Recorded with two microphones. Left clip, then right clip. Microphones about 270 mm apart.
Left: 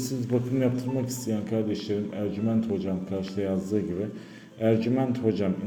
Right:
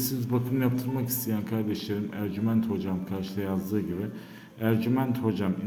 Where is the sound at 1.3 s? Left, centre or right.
Centre.